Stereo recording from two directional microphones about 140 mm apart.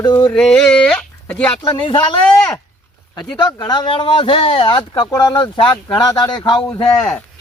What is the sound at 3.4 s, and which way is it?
Speech, 30° left (ahead or behind).